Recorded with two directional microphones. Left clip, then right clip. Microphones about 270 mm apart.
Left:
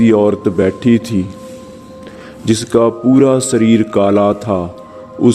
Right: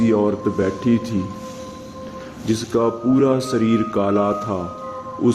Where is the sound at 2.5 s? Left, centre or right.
Left.